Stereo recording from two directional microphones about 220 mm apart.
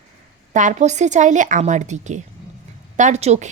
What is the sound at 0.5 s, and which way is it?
A woman's voice, 35° right (ahead or behind).